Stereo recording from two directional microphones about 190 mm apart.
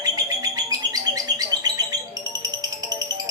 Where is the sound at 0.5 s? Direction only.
20° right (ahead or behind).